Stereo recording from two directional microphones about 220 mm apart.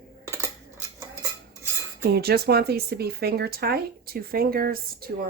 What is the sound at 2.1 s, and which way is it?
Speech, 45° right (ahead or behind).